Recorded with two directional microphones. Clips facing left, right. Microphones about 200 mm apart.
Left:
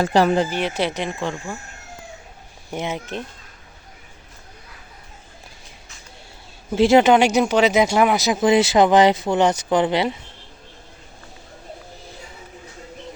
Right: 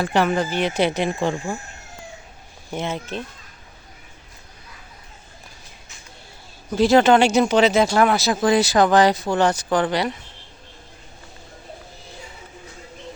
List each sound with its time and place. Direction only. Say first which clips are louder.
0.0 s speech: left 3 dB; 35° left (ahead or behind)
0.5 s speech: right 2 dB; 5° left (ahead or behind)
2.7 s speech: even; 15° left (ahead or behind)
6.7 s speech: left 1 dB; 25° left (ahead or behind)